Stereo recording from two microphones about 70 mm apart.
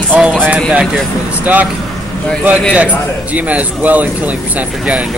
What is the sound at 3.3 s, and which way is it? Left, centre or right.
A man's voice, centre.